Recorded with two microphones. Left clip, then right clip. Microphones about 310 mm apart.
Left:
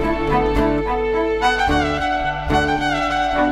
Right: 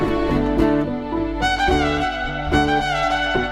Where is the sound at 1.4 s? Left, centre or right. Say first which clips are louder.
Right 2 dB; centre.